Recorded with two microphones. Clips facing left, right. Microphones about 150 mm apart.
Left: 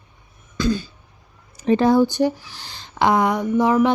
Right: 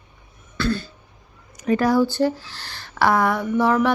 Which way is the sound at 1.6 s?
25° left (ahead or behind).